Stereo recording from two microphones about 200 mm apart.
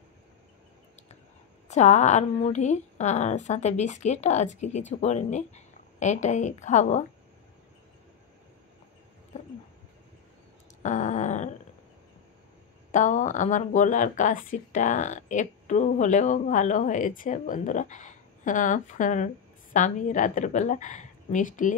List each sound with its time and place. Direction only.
1.7 s speech: 35° left (ahead or behind)
10.8 s a sound: 35° left (ahead or behind)
12.9 s speech: 40° left (ahead or behind)